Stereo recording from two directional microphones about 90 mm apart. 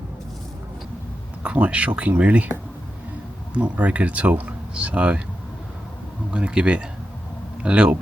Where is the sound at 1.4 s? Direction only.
15° right (ahead or behind).